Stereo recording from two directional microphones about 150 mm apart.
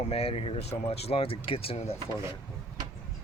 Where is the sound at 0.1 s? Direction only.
40° left (ahead or behind).